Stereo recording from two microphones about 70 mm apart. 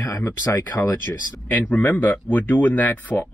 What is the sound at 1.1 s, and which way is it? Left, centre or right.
Speech, left.